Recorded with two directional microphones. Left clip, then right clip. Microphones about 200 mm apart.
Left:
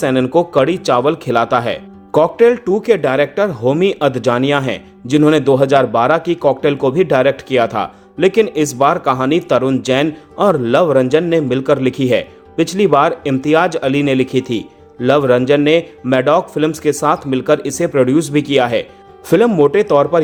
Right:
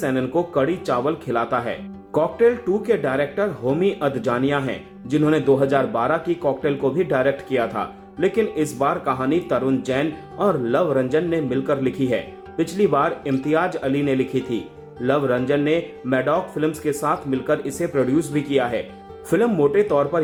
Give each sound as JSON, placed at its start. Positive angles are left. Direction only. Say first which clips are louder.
{"t": 0.0, "sound": "speech", "louder": "left 8 dB", "side_deg": 35}